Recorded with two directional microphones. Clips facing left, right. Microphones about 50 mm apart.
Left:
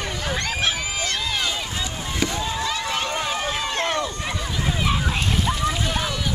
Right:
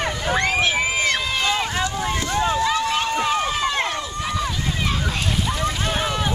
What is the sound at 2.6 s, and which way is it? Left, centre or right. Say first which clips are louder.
Run: right 5 dB; right.